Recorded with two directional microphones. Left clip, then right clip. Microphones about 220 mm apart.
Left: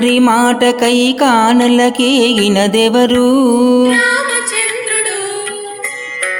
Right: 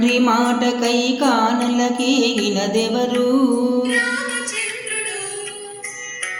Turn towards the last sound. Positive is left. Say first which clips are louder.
# left 8 dB
turn(degrees=30)  # may be behind; listen again after turning